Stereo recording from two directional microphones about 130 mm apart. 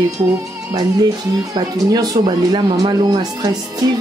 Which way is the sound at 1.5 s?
30° right (ahead or behind).